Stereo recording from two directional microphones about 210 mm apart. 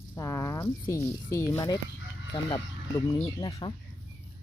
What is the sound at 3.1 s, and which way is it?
Speech, 20° left (ahead or behind).